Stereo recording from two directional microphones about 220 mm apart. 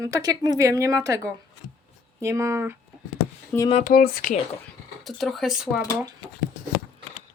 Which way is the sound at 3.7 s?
35° left (ahead or behind).